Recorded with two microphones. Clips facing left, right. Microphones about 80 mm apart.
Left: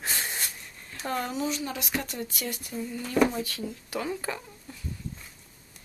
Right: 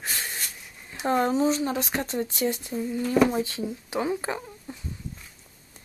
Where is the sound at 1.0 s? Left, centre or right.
Right.